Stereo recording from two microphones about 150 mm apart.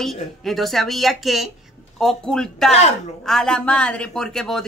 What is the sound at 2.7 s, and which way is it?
Speech, 45° left (ahead or behind).